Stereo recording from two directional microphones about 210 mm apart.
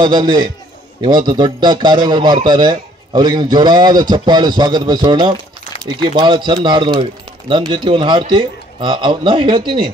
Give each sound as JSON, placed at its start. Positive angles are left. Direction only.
{"t": 0.0, "sound": "a man's voice", "side_deg": -20}